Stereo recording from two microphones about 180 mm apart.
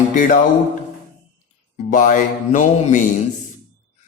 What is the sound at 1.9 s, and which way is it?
Mantra, 45° left (ahead or behind).